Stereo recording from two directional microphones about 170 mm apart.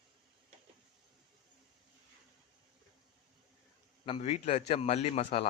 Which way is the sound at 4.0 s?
35° left (ahead or behind).